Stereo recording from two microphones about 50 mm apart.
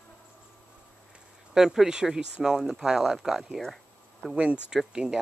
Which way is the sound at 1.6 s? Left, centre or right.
Centre.